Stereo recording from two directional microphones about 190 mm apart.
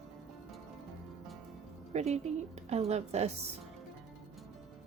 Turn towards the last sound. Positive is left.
turn(degrees=-35)  # may be behind; listen again after turning